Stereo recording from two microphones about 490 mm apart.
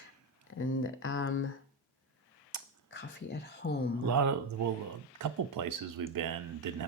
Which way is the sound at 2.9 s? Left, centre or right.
Left.